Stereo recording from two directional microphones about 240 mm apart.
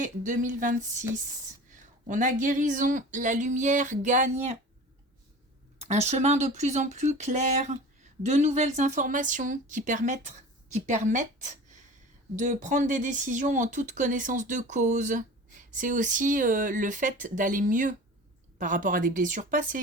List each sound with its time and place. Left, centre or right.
0.0 s speech: right
2.0 s speech: right
5.8 s speech: right